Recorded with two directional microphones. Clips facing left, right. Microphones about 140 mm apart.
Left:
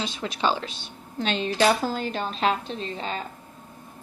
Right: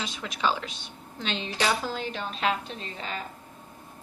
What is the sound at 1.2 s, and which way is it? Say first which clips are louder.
A woman's voice: left 6 dB; 45° left (ahead or behind).